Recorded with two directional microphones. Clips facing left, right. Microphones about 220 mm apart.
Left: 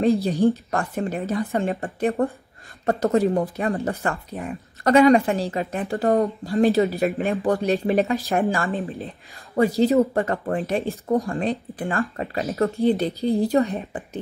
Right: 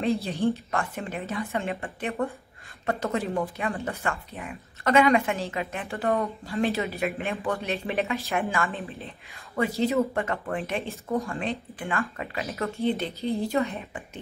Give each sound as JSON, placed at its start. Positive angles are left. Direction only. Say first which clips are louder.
{"t": 0.0, "sound": "speech", "louder": "left 6 dB", "side_deg": 45}
{"t": 8.5, "sound": "speech", "louder": "left 5 dB", "side_deg": 30}
{"t": 8.7, "sound": "speech", "louder": "left 8 dB", "side_deg": 45}